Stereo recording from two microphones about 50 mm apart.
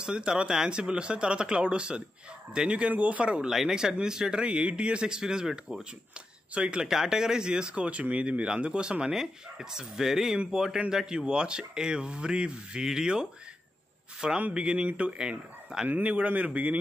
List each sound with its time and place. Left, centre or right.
0.0 s speech: centre
3.4 s speech: centre
6.5 s speech: right
14.5 s speech: centre